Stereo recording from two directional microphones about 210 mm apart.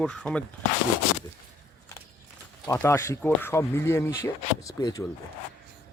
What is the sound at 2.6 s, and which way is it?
Speech, 10° left (ahead or behind).